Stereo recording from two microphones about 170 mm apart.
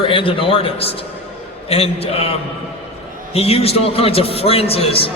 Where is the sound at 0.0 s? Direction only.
30° left (ahead or behind).